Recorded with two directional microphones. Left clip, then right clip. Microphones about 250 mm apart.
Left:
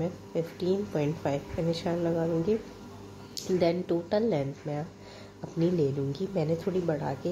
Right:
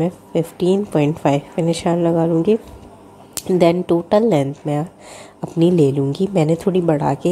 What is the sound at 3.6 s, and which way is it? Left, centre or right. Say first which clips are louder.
A woman's voice: right 13 dB; right.